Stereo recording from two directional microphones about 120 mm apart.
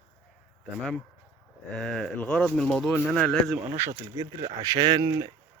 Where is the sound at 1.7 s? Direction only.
5° left (ahead or behind).